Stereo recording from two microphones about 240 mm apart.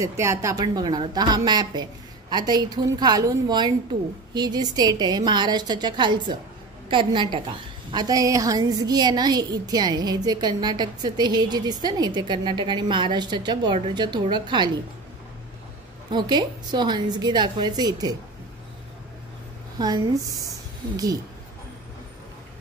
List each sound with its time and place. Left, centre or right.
0.0 s a woman's voice: centre
16.1 s a woman's voice: centre
20.4 s a sound: centre